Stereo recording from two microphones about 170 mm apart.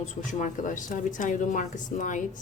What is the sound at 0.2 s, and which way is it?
A woman's voice, 50° left (ahead or behind).